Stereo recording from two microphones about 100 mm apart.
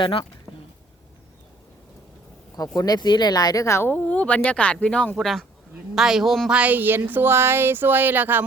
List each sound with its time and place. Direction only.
0.0 s speech: 65° left (ahead or behind)
2.6 s speech: 40° left (ahead or behind)
3.9 s a man's voice: 15° left (ahead or behind); by 6.6 s centre (ahead or behind)
6.6 s speech: 15° right (ahead or behind)